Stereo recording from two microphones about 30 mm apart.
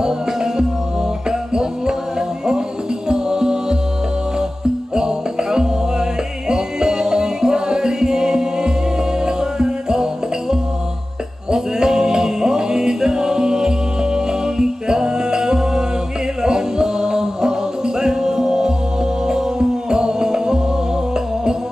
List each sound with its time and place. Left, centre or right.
0.0 s music: right
4.9 s music: right
11.5 s music: centre